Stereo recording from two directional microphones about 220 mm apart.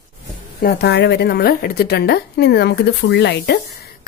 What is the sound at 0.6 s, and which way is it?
A woman's voice, 50° left (ahead or behind).